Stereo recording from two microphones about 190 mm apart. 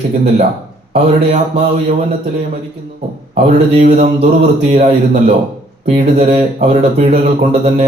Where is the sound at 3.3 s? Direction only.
40° right (ahead or behind).